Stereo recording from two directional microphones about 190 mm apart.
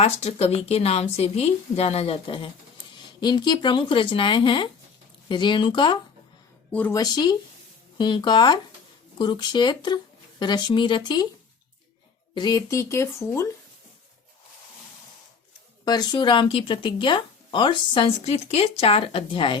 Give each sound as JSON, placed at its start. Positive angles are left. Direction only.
{"t": 0.0, "sound": "a woman's voice", "side_deg": 30}
{"t": 6.7, "sound": "speech", "side_deg": 10}
{"t": 7.0, "sound": "speech", "side_deg": 20}
{"t": 12.3, "sound": "speech", "side_deg": 20}
{"t": 15.8, "sound": "speech", "side_deg": 20}